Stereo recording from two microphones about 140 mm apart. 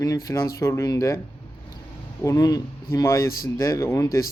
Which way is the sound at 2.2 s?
25° left (ahead or behind).